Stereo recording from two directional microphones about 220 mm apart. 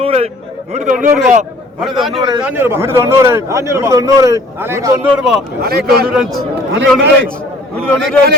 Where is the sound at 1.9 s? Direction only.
Centre (ahead or behind).